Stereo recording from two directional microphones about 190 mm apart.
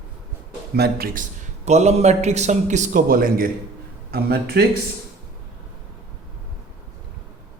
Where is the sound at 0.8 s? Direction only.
50° right (ahead or behind).